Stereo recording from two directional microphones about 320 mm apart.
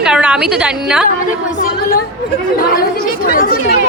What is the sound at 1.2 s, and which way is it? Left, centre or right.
A woman's voice, left.